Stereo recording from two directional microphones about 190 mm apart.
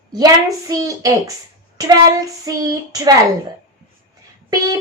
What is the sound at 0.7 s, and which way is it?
Speech, 20° right (ahead or behind).